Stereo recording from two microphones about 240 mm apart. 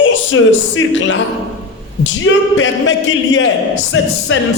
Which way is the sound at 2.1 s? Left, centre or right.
Left.